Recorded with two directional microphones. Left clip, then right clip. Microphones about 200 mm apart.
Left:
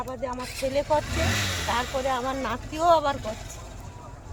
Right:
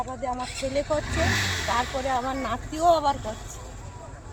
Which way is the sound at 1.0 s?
55° left (ahead or behind).